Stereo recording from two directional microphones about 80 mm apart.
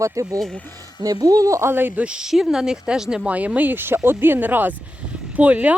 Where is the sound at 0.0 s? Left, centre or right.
Right.